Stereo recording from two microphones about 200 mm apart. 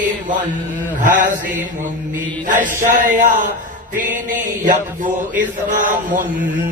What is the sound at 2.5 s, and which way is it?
Chant, 40° right (ahead or behind).